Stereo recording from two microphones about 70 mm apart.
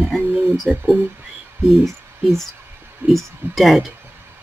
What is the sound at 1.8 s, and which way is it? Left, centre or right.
Speech, centre.